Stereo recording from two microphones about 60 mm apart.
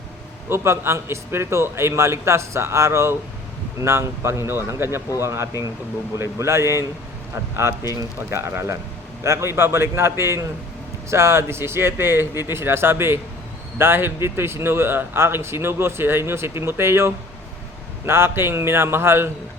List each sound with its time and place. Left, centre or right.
0.5 s a man's voice: right